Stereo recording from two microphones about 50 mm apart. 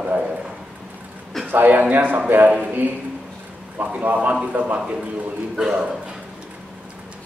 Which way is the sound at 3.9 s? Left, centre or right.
Right.